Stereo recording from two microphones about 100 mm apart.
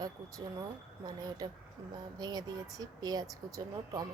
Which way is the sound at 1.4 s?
45° right (ahead or behind).